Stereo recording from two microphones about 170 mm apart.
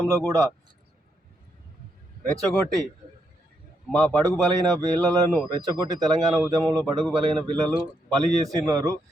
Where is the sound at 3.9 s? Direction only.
5° left (ahead or behind).